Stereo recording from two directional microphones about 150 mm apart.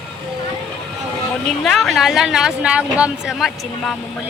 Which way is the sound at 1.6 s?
Centre (ahead or behind).